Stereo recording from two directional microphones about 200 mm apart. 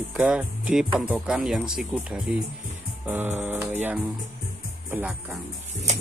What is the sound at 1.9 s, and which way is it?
Mantra, 5° right (ahead or behind).